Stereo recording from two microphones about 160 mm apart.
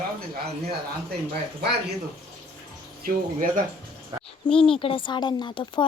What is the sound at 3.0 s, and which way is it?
Speech, 55° right (ahead or behind).